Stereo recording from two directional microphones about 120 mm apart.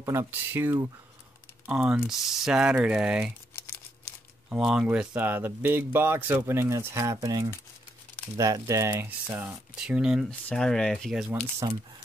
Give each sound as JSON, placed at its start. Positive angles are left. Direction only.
{"t": 0.0, "sound": "speech", "side_deg": -25}
{"t": 0.3, "sound": "speech", "side_deg": -15}
{"t": 3.5, "sound": "crumpling", "side_deg": 20}
{"t": 4.5, "sound": "speech", "side_deg": -5}
{"t": 9.8, "sound": "speech", "side_deg": -5}
{"t": 10.5, "sound": "speech", "side_deg": 5}
{"t": 11.6, "sound": "speech", "side_deg": -30}